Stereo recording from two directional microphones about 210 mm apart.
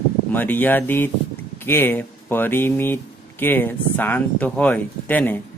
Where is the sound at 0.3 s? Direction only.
10° left (ahead or behind).